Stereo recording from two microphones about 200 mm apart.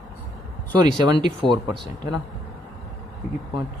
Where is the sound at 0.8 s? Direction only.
20° right (ahead or behind).